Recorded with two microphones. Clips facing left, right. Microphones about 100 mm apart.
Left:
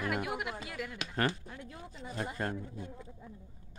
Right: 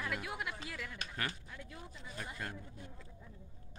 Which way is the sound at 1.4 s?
25° left (ahead or behind).